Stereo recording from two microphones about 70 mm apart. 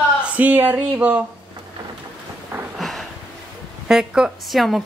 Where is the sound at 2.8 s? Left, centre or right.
Centre.